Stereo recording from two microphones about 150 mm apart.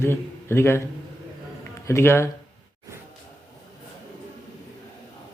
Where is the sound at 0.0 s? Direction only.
15° left (ahead or behind).